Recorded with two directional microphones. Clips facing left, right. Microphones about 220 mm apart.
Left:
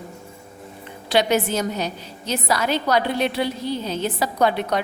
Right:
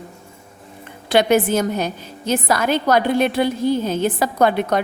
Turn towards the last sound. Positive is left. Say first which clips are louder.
# right 3 dB
turn(degrees=-50)  # may be behind; listen again after turning